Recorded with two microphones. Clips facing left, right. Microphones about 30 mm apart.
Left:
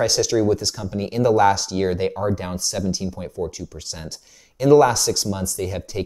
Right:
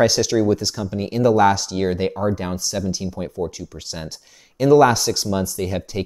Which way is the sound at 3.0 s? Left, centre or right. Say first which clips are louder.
Right 2 dB; centre.